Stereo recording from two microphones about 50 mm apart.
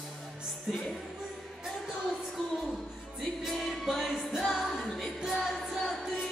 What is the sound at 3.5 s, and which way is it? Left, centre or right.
Music, centre.